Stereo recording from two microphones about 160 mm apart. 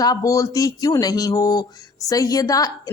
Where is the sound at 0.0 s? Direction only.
20° left (ahead or behind).